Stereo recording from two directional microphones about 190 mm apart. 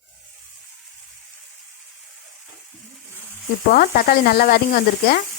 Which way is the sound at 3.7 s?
50° left (ahead or behind).